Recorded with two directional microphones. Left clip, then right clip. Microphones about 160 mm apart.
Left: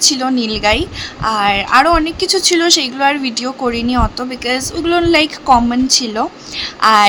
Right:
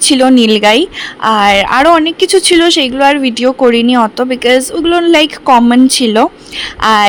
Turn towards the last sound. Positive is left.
turn(degrees=-30)  # may be behind; listen again after turning